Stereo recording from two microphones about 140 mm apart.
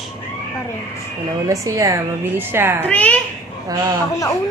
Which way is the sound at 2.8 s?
10° left (ahead or behind).